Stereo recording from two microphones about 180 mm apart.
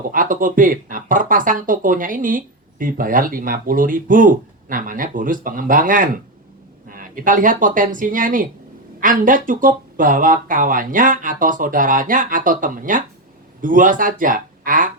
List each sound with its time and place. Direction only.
0.1 s speech: 50° right (ahead or behind)